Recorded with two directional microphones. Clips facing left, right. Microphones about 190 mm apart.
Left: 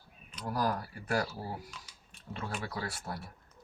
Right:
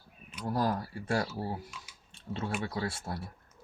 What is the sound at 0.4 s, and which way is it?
Speech, 25° right (ahead or behind).